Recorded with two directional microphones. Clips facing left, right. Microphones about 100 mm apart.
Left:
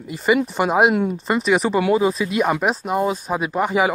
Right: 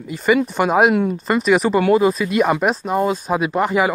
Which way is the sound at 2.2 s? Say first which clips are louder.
Right 2 dB; centre (ahead or behind).